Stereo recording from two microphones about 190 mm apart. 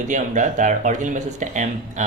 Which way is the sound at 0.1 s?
40° right (ahead or behind).